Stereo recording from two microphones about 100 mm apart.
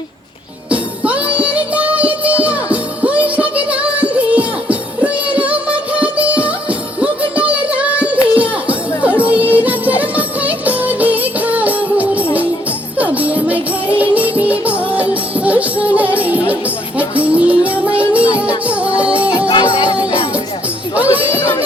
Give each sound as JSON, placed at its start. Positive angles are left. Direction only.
{"t": 0.7, "sound": "music", "side_deg": -15}
{"t": 19.5, "sound": "music", "side_deg": 55}
{"t": 20.9, "sound": "music", "side_deg": -15}
{"t": 21.3, "sound": "music", "side_deg": 25}